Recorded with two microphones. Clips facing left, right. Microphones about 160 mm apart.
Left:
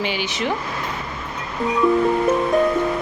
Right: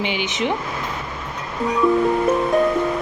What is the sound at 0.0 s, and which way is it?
Speech, 20° right (ahead or behind).